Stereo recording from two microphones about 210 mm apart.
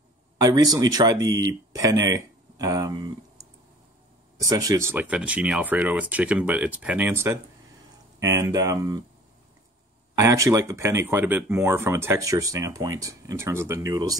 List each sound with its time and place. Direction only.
0.4 s speech: 15° right (ahead or behind)
4.4 s speech: 15° right (ahead or behind)
10.1 s speech: 15° right (ahead or behind)